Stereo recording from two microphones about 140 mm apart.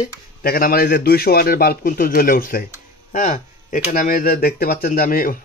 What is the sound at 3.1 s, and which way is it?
Speech, 65° left (ahead or behind).